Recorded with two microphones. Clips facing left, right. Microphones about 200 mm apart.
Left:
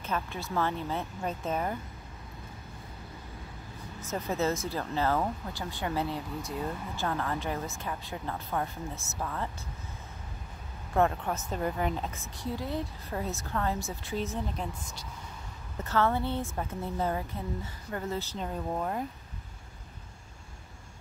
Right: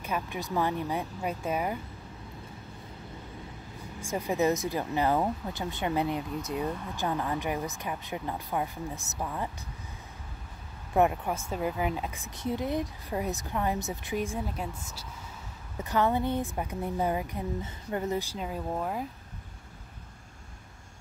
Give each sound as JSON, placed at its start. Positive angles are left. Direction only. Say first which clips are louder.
{"t": 0.0, "sound": "speech", "louder": "right 1 dB", "side_deg": -15}
{"t": 4.0, "sound": "speech", "louder": "right 3 dB", "side_deg": -10}
{"t": 11.0, "sound": "speech", "louder": "right 2 dB", "side_deg": -10}
{"t": 12.3, "sound": "speech", "louder": "right 6 dB", "side_deg": -20}